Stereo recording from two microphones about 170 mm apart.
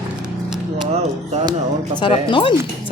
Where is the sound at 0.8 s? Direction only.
40° right (ahead or behind).